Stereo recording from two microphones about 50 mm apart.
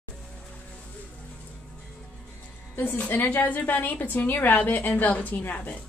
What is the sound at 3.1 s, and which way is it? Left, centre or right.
A woman's voice, left.